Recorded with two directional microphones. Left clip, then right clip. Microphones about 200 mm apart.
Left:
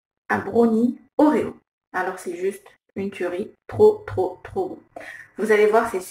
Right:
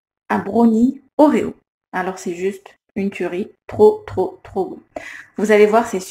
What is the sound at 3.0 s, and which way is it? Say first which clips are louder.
Speech: right 4 dB; 35° right (ahead or behind).